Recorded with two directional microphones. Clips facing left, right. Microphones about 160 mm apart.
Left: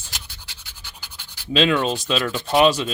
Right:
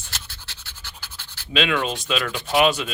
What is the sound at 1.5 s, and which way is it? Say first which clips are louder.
Speech: left 4 dB; 35° left (ahead or behind).